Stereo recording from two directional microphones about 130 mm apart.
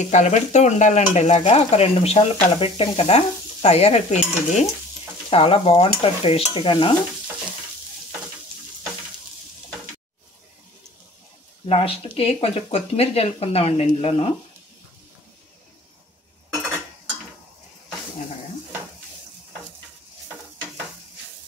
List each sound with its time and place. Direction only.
0.0 s stir: 65° left (ahead or behind)
2.5 s speech: 45° left (ahead or behind)
5.3 s speech: 45° left (ahead or behind)
11.6 s speech: 50° left (ahead or behind)